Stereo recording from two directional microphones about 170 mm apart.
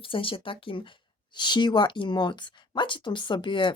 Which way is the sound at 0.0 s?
30° left (ahead or behind).